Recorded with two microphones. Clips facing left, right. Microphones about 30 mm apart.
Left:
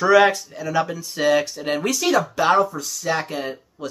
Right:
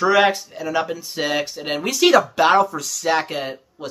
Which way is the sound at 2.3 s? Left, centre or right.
Right.